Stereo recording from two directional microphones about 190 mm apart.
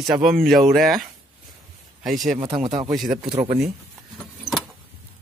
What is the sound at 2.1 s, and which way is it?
Speech, centre (ahead or behind).